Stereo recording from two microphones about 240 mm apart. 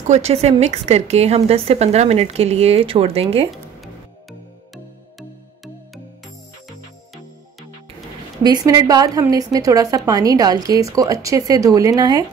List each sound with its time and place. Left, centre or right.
0.1 s a woman's voice: right
8.4 s a woman's voice: centre